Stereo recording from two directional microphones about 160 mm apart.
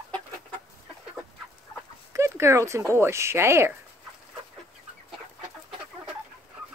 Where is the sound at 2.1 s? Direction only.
15° right (ahead or behind).